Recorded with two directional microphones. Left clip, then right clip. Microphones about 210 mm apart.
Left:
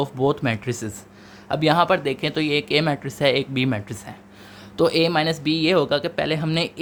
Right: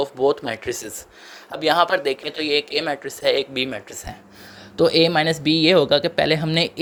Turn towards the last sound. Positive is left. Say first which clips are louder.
# right 4 dB
turn(degrees=-15)  # may be behind; listen again after turning